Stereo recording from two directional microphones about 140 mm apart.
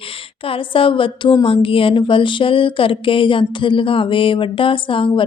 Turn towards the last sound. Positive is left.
turn(degrees=40)  # may be behind; listen again after turning